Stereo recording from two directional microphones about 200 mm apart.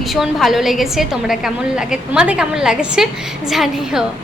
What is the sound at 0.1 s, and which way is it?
A woman's voice, centre (ahead or behind).